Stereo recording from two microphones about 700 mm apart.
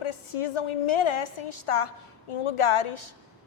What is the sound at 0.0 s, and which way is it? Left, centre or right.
A woman's voice, left.